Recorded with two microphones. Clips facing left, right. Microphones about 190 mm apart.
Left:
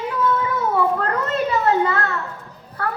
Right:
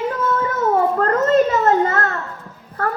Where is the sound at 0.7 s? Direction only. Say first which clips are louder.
Right 4 dB; 45° right (ahead or behind).